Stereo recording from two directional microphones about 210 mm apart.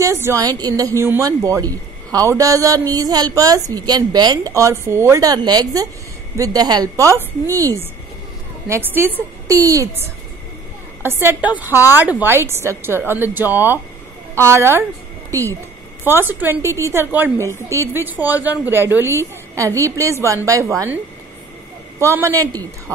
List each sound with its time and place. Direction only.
0.0 s speech: 15° right (ahead or behind)
22.0 s speech: 15° right (ahead or behind)